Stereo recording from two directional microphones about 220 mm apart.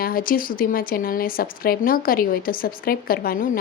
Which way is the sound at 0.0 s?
40° left (ahead or behind).